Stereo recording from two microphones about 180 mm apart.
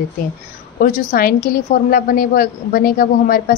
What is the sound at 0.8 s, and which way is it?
A woman's voice, 55° left (ahead or behind).